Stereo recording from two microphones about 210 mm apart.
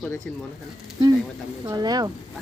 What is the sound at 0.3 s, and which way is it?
Speech, 5° left (ahead or behind).